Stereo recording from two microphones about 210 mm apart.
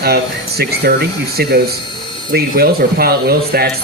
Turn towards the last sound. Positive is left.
turn(degrees=-45)  # may be behind; listen again after turning